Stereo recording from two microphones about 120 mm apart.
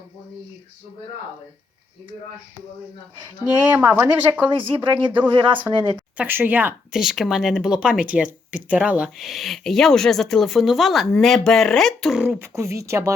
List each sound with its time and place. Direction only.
3.4 s speech: 15° right (ahead or behind)
4.4 s speech: 40° right (ahead or behind)
6.1 s speech: 15° right (ahead or behind); by 12.2 s centre (ahead or behind)
12.2 s speech: 10° right (ahead or behind)
12.5 s speech: 25° right (ahead or behind)